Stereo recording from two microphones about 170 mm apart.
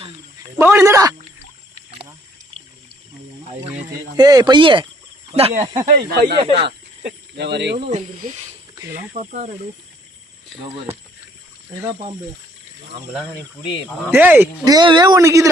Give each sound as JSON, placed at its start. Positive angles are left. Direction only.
{"t": 0.5, "sound": "speech", "side_deg": -10}
{"t": 3.5, "sound": "speech", "side_deg": -35}
{"t": 6.1, "sound": "speech", "side_deg": -70}
{"t": 6.3, "sound": "speech", "side_deg": -35}
{"t": 6.7, "sound": "speech", "side_deg": -90}
{"t": 7.9, "sound": "speech", "side_deg": -45}
{"t": 10.5, "sound": "speech", "side_deg": 0}
{"t": 11.7, "sound": "speech", "side_deg": -25}
{"t": 14.1, "sound": "speech", "side_deg": -10}
{"t": 14.6, "sound": "speech", "side_deg": -25}